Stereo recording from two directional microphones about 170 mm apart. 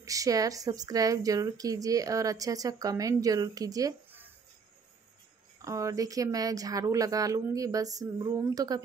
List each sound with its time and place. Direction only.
0.0 s a woman's voice: 20° right (ahead or behind)
5.6 s a woman's voice: 20° right (ahead or behind)